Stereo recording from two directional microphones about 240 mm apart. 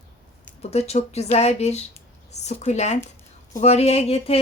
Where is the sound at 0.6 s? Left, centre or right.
Left.